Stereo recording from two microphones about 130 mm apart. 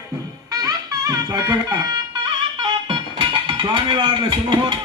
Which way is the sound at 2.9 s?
40° right (ahead or behind).